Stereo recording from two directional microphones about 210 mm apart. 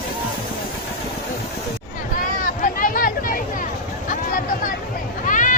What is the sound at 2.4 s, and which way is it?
Chatter, 40° left (ahead or behind).